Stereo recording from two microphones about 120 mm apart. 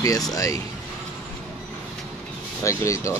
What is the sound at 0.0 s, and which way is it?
Speech, 30° left (ahead or behind).